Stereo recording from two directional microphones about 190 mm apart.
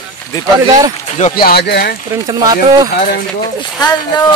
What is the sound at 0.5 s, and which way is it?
Speech, 15° right (ahead or behind).